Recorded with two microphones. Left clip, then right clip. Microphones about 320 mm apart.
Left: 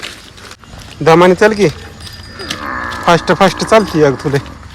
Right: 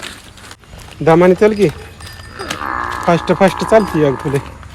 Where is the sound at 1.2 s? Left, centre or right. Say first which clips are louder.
Left 2 dB; centre.